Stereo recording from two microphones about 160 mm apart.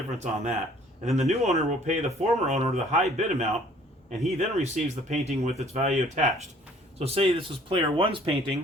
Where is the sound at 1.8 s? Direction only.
45° right (ahead or behind).